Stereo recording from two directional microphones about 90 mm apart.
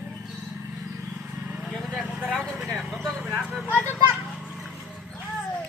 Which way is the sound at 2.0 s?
15° right (ahead or behind).